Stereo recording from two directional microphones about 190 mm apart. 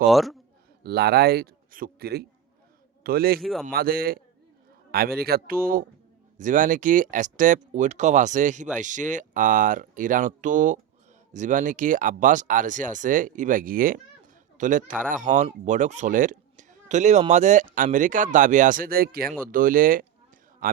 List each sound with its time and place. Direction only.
0.0 s a man's voice: centre (ahead or behind)
0.8 s a man's voice: 55° right (ahead or behind)
3.4 s a man's voice: centre (ahead or behind)
3.7 s speech: 50° right (ahead or behind)